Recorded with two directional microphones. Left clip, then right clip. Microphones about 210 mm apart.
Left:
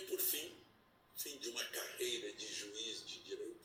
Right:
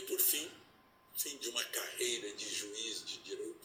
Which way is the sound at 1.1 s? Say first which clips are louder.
Right 5 dB; 40° right (ahead or behind).